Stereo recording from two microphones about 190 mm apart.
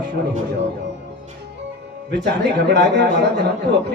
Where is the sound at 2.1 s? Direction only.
60° right (ahead or behind).